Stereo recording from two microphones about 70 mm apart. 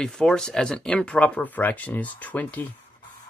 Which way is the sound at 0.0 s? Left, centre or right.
Centre.